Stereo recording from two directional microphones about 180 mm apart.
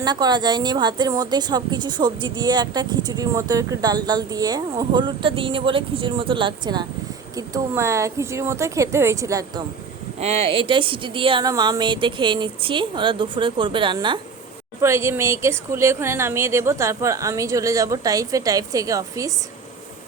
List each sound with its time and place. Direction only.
0.0 s a woman's voice: 25° right (ahead or behind)
10.2 s a woman's voice: 35° right (ahead or behind)
14.8 s a woman's voice: 15° right (ahead or behind)